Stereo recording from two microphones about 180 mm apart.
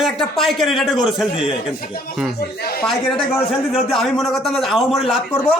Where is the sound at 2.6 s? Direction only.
55° left (ahead or behind).